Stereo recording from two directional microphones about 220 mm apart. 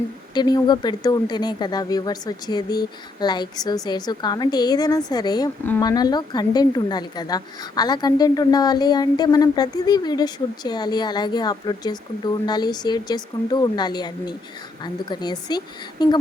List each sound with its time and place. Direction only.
0.3 s speech: 20° left (ahead or behind)